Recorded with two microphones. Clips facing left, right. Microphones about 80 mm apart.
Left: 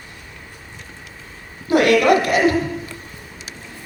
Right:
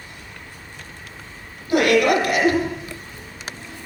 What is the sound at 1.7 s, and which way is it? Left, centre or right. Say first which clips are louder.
Speech: left 3 dB; left.